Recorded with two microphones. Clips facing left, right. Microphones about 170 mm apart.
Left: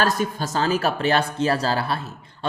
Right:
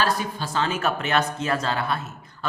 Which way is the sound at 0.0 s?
45° left (ahead or behind).